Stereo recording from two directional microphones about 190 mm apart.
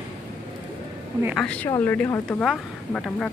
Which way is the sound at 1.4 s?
5° left (ahead or behind).